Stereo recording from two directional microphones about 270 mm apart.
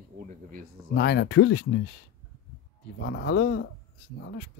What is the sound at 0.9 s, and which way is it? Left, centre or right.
Speech, left.